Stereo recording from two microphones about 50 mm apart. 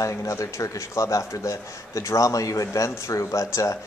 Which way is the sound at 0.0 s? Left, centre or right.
Left.